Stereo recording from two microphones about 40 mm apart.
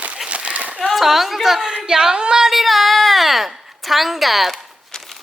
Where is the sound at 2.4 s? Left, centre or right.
Centre.